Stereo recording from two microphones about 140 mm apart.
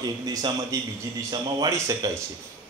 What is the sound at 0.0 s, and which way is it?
A man's voice, 30° right (ahead or behind).